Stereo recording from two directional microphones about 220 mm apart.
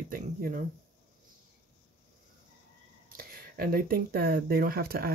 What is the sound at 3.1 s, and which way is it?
Speech, 45° right (ahead or behind).